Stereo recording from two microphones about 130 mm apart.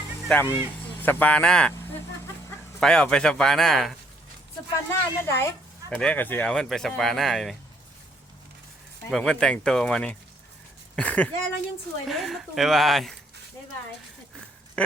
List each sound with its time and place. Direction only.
0.3 s speech: 15° left (ahead or behind)
1.7 s vehicle: 20° left (ahead or behind)
2.8 s speech: 5° left (ahead or behind)
4.9 s speech: 20° left (ahead or behind); by 7.5 s centre (ahead or behind)
9.0 s speech: 5° left (ahead or behind)
12.0 s speech: centre (ahead or behind)